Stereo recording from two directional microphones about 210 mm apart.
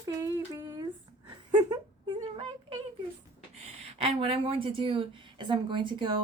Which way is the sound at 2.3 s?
25° right (ahead or behind).